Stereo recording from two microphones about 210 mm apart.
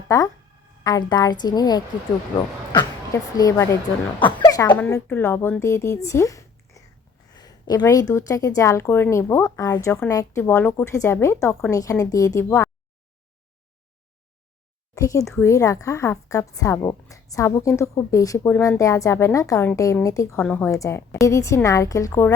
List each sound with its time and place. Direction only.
0.1 s a woman's voice: 15° left (ahead or behind)
14.9 s a woman's voice: 15° left (ahead or behind)